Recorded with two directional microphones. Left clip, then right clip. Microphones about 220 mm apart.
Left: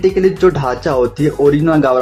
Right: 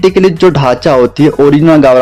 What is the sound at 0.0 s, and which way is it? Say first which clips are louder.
Speech: right 5 dB; 45° right (ahead or behind).